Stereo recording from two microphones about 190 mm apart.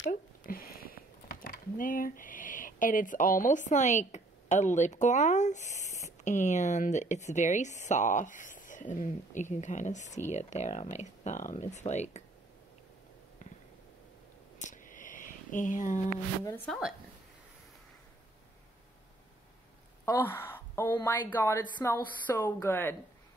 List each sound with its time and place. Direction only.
0.5 s speech: 50° left (ahead or behind)
14.6 s a sound: 40° left (ahead or behind)
16.4 s a woman's voice: 10° left (ahead or behind)
20.1 s a woman's voice: 10° left (ahead or behind)